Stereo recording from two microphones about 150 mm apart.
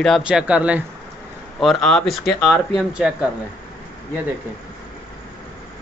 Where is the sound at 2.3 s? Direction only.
15° left (ahead or behind).